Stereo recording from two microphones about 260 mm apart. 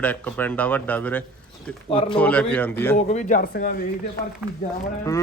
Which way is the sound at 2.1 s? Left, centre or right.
Centre.